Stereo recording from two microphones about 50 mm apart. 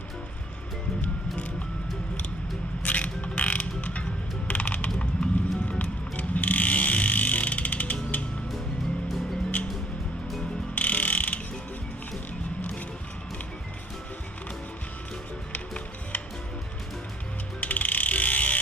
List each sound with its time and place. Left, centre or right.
2.8 s mechanisms: left
4.4 s music: left
10.8 s ratchet: left
15.5 s music: left
17.6 s ratchet: left